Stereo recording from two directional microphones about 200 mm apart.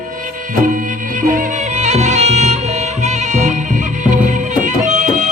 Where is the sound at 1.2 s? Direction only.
40° right (ahead or behind).